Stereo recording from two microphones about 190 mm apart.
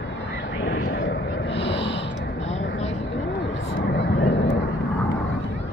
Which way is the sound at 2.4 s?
35° left (ahead or behind).